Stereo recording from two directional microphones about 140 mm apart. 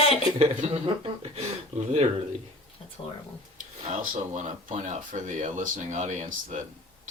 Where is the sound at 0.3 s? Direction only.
50° right (ahead or behind).